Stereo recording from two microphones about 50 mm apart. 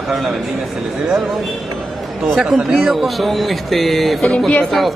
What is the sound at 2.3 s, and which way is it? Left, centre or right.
Speech, centre.